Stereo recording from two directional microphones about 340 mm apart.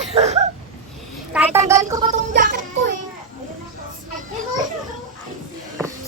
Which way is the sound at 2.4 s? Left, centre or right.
Right.